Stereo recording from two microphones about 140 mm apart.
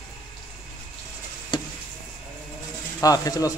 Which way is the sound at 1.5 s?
30° left (ahead or behind).